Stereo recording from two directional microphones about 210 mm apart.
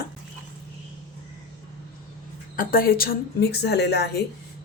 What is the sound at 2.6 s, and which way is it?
Speech, 45° left (ahead or behind).